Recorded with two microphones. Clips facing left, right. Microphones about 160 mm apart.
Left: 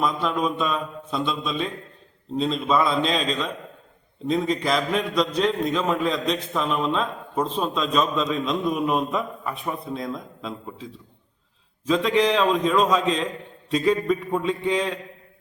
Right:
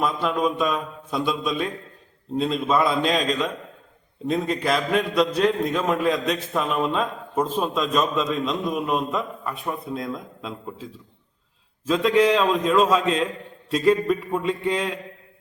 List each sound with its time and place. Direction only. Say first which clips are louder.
0.0 s a man's voice: right 1 dB; 5° right (ahead or behind)
11.9 s a man's voice: right 2 dB; centre (ahead or behind)